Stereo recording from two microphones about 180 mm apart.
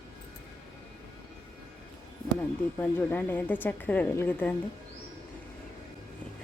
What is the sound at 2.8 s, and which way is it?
A woman's voice, 10° left (ahead or behind).